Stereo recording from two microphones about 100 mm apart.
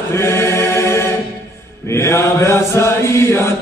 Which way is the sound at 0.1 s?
25° left (ahead or behind).